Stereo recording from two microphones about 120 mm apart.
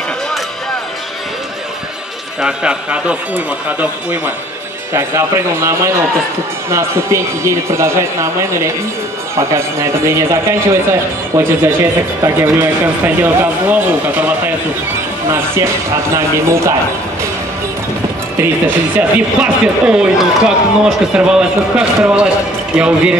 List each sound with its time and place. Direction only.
2.4 s speech: 5° right (ahead or behind); by 16.7 s 25° right (ahead or behind)
18.4 s speech: 15° right (ahead or behind)